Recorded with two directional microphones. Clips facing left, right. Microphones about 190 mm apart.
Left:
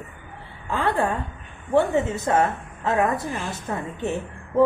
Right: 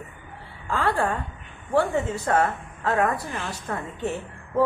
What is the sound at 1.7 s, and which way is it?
A woman's voice, 20° left (ahead or behind).